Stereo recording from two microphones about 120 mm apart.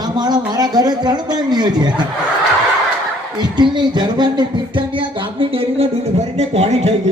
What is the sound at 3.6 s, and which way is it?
Speech, 40° right (ahead or behind).